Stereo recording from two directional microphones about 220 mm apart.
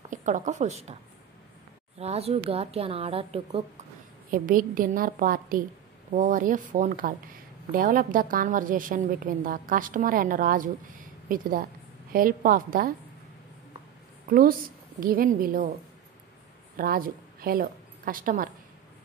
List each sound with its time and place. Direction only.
0.1 s a woman's voice: 35° right (ahead or behind)
2.0 s a woman's voice: 30° right (ahead or behind)
4.3 s a woman's voice: 40° right (ahead or behind)
15.0 s a woman's voice: 40° right (ahead or behind)
16.7 s a woman's voice: 40° right (ahead or behind)